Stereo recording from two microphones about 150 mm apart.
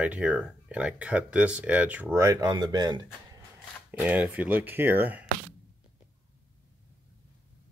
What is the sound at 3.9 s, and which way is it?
Speech, 10° right (ahead or behind).